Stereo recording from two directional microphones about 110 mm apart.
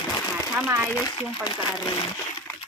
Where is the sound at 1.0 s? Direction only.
40° left (ahead or behind).